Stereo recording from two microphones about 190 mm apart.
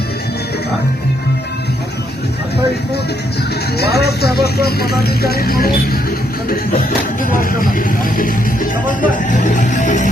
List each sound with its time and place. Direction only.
3.8 s vehicle: 60° left (ahead or behind)
4.6 s speech: 55° left (ahead or behind)
8.9 s music: 40° left (ahead or behind)